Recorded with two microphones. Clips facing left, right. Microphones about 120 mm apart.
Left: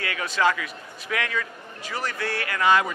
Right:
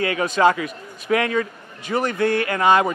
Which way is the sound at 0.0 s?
25° right (ahead or behind).